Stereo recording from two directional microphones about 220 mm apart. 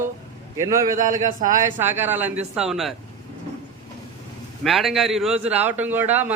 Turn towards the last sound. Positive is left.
turn(degrees=-10)  # may be behind; listen again after turning